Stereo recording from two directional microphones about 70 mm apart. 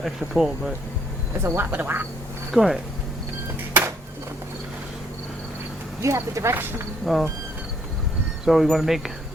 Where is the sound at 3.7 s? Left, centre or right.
Right.